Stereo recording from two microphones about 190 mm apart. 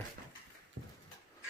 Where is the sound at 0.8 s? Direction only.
60° right (ahead or behind).